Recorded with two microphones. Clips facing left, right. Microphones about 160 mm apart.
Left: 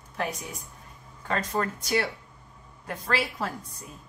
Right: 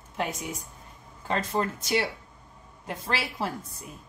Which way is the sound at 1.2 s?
25° right (ahead or behind).